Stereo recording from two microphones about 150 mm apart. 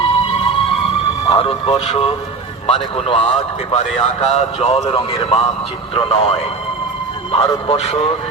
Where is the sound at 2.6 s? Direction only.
40° left (ahead or behind).